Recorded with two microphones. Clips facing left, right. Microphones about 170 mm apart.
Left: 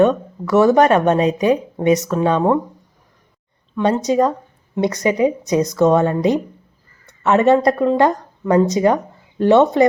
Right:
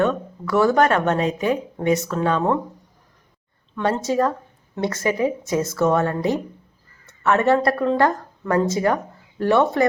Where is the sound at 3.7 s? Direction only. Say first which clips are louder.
Left 5 dB; 15° left (ahead or behind).